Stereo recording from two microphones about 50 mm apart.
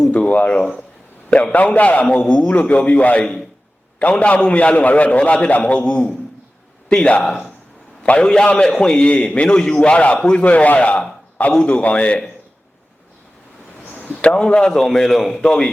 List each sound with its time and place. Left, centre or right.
0.1 s a man's voice: left
10.4 s a man's voice: left
13.9 s a sound: left
14.4 s a man's voice: centre
14.8 s a man's voice: centre